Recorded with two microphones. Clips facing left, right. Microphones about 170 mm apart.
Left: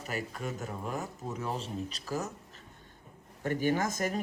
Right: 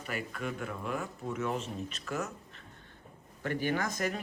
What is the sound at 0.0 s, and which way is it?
A man's voice, 40° left (ahead or behind).